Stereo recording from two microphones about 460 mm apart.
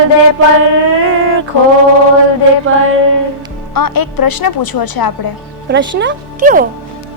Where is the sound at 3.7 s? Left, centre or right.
Left.